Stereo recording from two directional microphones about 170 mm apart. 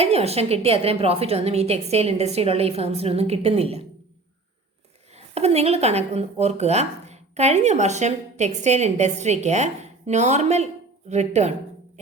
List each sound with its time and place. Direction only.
0.0 s speech: 35° right (ahead or behind)
5.1 s a woman's voice: 40° right (ahead or behind)